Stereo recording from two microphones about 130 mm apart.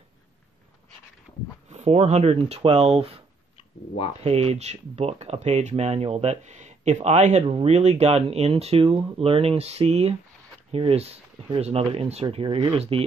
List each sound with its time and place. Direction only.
1.7 s speech: 55° right (ahead or behind)
3.5 s a sound: 50° left (ahead or behind)
4.2 s speech: 50° right (ahead or behind)